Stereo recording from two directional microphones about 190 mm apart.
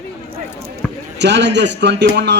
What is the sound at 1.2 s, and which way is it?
A man's voice, 65° right (ahead or behind).